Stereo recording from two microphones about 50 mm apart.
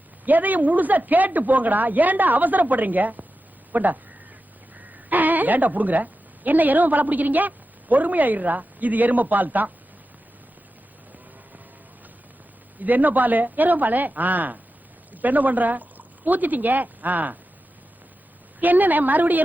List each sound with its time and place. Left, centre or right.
0.3 s speech: right
5.0 s a woman's voice: right
12.8 s speech: right
18.6 s speech: right